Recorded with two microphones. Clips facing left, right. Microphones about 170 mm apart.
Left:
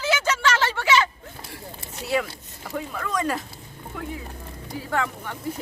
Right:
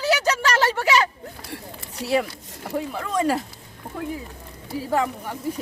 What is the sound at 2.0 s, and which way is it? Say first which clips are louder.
Speech: right 3 dB; 35° right (ahead or behind).